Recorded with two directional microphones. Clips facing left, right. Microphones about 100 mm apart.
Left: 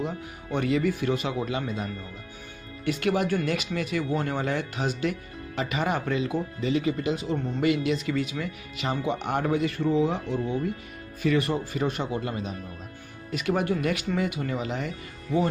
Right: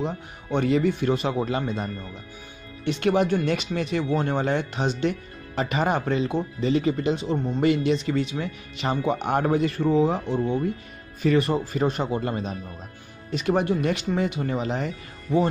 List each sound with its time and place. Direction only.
0.0 s speech: 30° right (ahead or behind)